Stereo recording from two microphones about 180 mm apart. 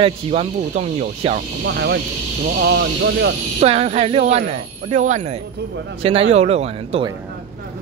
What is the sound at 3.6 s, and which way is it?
Speech, 35° right (ahead or behind).